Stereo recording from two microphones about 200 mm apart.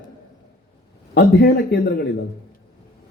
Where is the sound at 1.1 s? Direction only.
55° left (ahead or behind).